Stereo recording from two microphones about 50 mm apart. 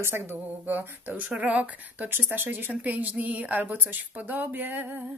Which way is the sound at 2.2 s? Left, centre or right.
Right.